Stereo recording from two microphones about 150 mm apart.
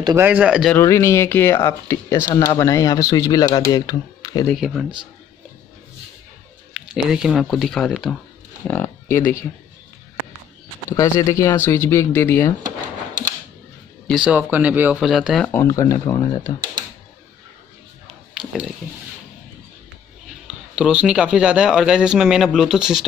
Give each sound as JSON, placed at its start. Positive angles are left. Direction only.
{"t": 0.2, "sound": "speech", "side_deg": -10}
{"t": 0.7, "sound": "speech", "side_deg": 20}
{"t": 4.6, "sound": "speech", "side_deg": 0}
{"t": 6.7, "sound": "speech", "side_deg": -5}
{"t": 8.6, "sound": "speech", "side_deg": 15}
{"t": 10.9, "sound": "speech", "side_deg": 20}
{"t": 14.0, "sound": "speech", "side_deg": -5}
{"t": 15.5, "sound": "speech", "side_deg": 20}
{"t": 20.4, "sound": "speech", "side_deg": -5}